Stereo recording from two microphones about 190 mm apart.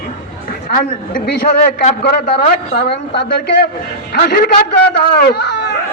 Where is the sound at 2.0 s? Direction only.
55° left (ahead or behind).